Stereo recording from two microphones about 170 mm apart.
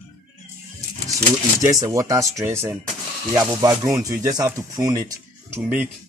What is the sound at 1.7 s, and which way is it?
Speech, 20° right (ahead or behind).